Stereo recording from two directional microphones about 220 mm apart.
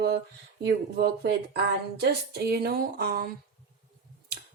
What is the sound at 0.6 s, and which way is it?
Speech, 45° right (ahead or behind).